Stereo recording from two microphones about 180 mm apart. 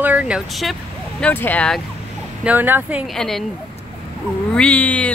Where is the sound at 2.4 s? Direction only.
10° right (ahead or behind).